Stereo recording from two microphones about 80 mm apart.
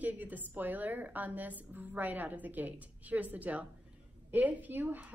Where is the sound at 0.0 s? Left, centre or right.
Right.